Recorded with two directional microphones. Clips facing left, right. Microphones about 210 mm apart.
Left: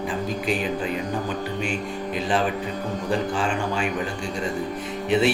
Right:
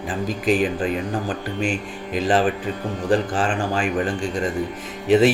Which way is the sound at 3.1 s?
90° right.